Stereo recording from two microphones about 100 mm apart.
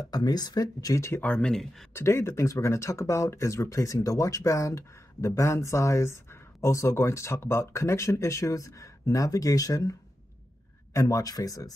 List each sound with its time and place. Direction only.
0.0 s speech: 40° left (ahead or behind)
1.2 s speech: 10° left (ahead or behind)
2.0 s speech: 25° left (ahead or behind)